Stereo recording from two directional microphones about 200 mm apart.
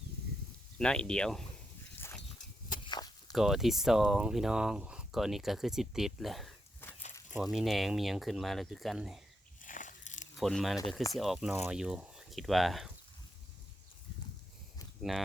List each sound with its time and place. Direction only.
0.8 s speech: 5° left (ahead or behind)
2.0 s a sound: 10° left (ahead or behind)
2.8 s walk: 20° left (ahead or behind)
3.3 s speech: centre (ahead or behind)
9.6 s biting: 40° left (ahead or behind)
10.3 s speech: centre (ahead or behind)
15.1 s speech: centre (ahead or behind)